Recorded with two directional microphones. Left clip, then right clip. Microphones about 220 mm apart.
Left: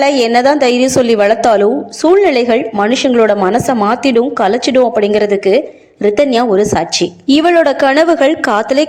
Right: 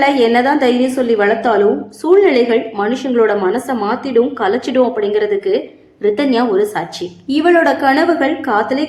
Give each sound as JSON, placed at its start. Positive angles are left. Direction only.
{"t": 0.0, "sound": "a woman's voice", "side_deg": 35}